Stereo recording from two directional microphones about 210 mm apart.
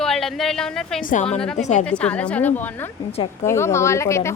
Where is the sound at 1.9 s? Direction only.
5° left (ahead or behind).